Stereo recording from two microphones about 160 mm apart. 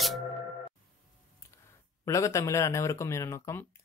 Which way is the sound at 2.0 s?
20° left (ahead or behind).